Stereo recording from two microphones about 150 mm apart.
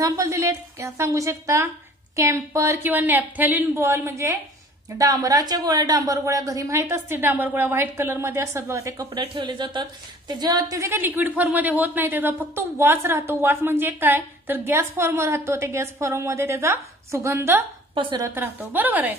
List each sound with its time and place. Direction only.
0.0 s a woman's voice: 20° right (ahead or behind)
17.9 s a woman's voice: 35° right (ahead or behind)
18.2 s a woman's voice: 15° right (ahead or behind)